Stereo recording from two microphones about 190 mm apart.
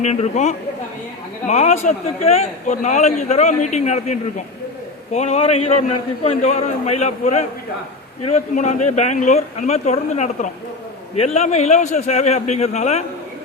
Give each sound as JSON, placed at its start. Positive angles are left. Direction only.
{"t": 0.0, "sound": "a man's voice", "side_deg": 35}